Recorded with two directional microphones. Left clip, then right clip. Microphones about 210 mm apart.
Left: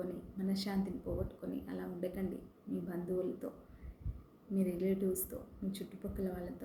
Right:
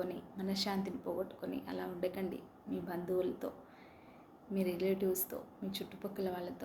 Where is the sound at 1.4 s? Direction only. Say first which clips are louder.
Right 2 dB; 15° left (ahead or behind).